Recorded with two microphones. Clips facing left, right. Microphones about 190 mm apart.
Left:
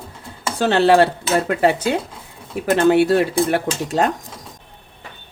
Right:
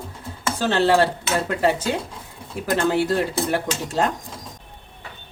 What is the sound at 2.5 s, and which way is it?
Speech, 60° left (ahead or behind).